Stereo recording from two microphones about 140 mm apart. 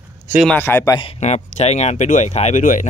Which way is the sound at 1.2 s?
50° left (ahead or behind).